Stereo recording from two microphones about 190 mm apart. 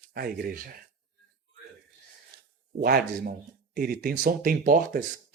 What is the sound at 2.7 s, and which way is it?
Speech, 55° right (ahead or behind).